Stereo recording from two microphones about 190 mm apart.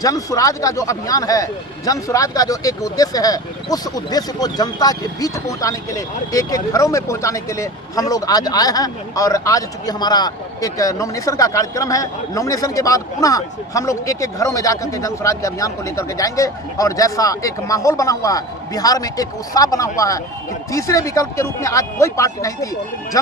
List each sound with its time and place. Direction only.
0.0 s speech: 20° left (ahead or behind)